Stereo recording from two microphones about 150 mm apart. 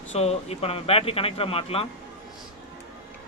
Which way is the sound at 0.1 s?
45° left (ahead or behind).